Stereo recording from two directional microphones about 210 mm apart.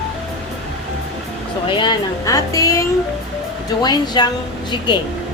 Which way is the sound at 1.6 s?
20° left (ahead or behind).